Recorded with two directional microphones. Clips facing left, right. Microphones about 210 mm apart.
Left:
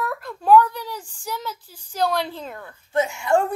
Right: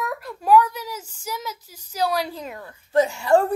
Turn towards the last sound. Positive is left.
turn(degrees=-35)  # may be behind; listen again after turning